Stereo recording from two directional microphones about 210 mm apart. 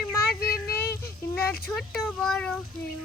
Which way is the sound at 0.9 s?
45° left (ahead or behind).